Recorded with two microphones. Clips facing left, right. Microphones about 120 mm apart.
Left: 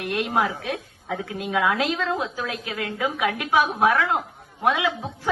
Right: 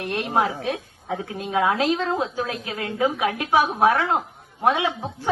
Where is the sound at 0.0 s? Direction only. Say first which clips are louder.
Right 1 dB; 30° right (ahead or behind).